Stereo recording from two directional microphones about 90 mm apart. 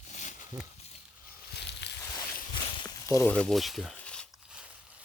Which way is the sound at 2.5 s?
70° left (ahead or behind).